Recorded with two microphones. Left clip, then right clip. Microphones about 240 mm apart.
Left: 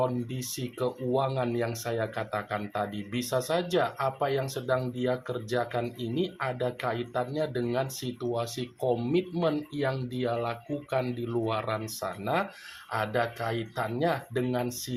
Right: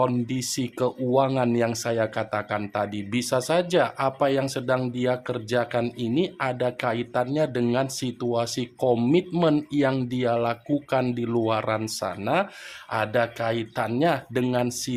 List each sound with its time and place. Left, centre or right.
0.0 s speech: right